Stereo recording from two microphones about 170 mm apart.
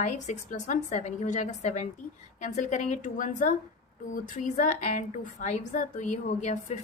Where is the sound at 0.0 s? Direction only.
45° left (ahead or behind).